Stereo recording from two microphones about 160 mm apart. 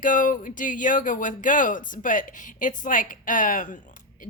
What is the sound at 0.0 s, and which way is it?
Speech, 55° left (ahead or behind).